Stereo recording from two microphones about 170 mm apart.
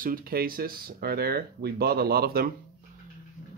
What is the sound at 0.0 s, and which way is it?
Speech, 60° right (ahead or behind).